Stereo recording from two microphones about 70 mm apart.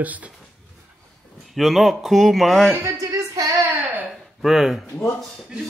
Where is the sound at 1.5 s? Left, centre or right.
Centre.